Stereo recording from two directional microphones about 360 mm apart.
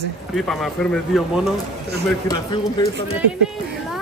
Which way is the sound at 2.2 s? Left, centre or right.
Centre.